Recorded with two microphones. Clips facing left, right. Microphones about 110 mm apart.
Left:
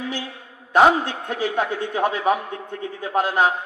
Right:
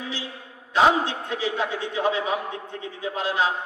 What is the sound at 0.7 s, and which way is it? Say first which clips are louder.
A man's voice: left 4 dB; 50° left (ahead or behind).